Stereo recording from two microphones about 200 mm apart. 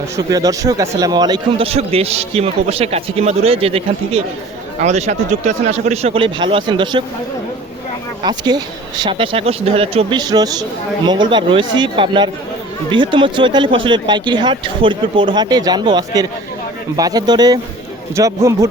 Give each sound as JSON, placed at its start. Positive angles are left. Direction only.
{"t": 0.2, "sound": "speech", "side_deg": -20}
{"t": 8.2, "sound": "a man's voice", "side_deg": -20}